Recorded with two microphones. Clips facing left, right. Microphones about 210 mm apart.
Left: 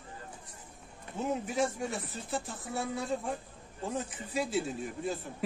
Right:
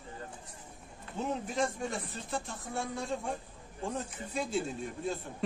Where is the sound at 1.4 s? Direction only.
5° left (ahead or behind).